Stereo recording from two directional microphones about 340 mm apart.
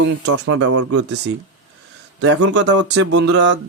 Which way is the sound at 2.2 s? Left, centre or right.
Right.